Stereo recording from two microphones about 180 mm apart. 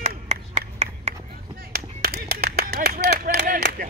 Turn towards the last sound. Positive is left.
turn(degrees=-55)  # may be behind; listen again after turning